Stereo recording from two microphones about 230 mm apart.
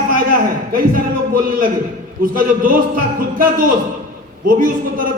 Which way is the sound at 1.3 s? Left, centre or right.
Right.